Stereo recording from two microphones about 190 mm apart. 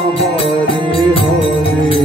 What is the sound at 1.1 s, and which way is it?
Music, 30° left (ahead or behind).